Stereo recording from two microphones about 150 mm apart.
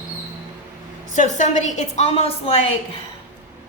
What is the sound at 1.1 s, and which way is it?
A woman's voice, 55° left (ahead or behind).